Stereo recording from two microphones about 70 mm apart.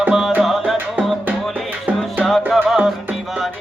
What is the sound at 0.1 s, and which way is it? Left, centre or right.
Music, centre.